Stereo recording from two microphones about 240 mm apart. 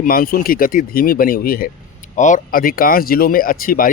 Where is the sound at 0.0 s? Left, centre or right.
Left.